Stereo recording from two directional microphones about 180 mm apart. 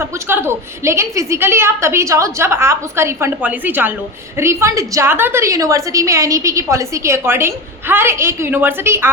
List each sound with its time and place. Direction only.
0.0 s a woman's voice: 15° right (ahead or behind)